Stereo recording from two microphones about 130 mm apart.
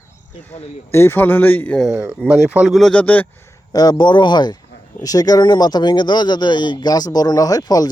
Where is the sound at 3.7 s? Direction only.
30° left (ahead or behind).